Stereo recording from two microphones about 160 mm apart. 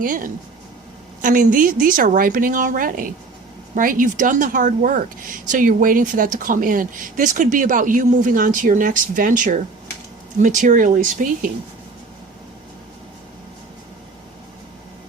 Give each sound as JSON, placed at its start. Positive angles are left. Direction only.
{"t": 0.0, "sound": "speech", "side_deg": -60}